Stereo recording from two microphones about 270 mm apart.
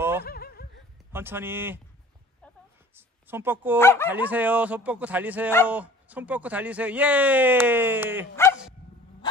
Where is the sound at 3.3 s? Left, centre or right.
Centre.